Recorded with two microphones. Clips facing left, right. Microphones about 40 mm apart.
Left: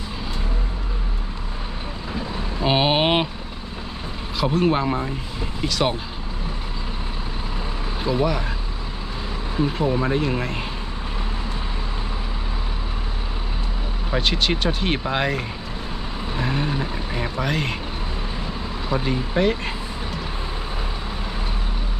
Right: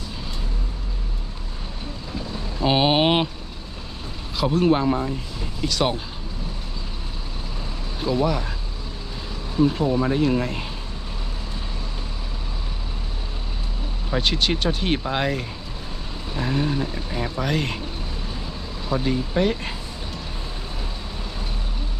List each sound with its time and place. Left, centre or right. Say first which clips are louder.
2.1 s boat: left 2 dB; left
2.6 s vehicle: even; centre
4.4 s speech: right 1 dB; centre
8.0 s speech: even; centre
9.6 s speech: right 2 dB; centre
14.1 s speech: left 1 dB; centre
18.9 s speech: right 1 dB; centre